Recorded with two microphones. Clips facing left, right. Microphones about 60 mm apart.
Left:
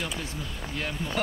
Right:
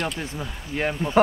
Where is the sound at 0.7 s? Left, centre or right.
Right.